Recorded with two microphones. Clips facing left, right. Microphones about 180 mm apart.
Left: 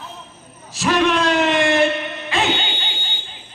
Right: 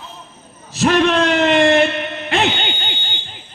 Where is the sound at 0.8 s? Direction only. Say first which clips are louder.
Right 3 dB; 60° right (ahead or behind).